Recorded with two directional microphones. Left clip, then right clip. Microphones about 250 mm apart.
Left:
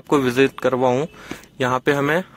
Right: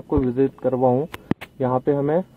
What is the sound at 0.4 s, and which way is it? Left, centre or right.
Speech, centre.